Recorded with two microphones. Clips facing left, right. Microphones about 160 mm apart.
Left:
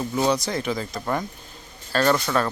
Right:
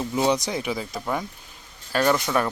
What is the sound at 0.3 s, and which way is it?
Speech, 15° right (ahead or behind).